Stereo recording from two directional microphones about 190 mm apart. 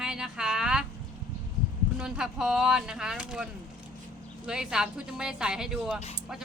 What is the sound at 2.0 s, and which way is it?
Speech, 5° right (ahead or behind).